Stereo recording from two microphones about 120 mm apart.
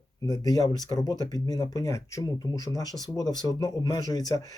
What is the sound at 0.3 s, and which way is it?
Speech, 30° left (ahead or behind).